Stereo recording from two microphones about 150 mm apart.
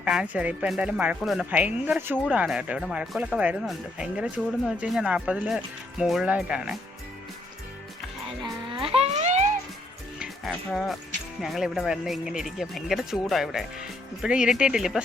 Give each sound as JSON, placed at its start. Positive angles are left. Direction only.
{"t": 0.0, "sound": "speech", "side_deg": -5}
{"t": 8.7, "sound": "music", "side_deg": -40}
{"t": 10.2, "sound": "livestock", "side_deg": 0}
{"t": 11.3, "sound": "speech", "side_deg": 0}